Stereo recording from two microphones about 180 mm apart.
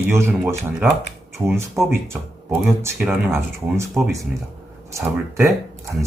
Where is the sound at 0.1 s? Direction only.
15° right (ahead or behind).